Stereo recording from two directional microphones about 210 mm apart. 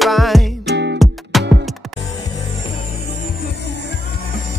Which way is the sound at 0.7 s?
55° right (ahead or behind).